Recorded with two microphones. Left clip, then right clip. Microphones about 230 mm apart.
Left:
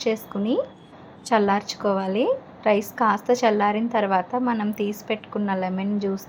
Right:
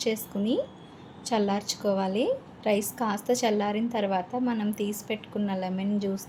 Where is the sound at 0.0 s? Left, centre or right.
Centre.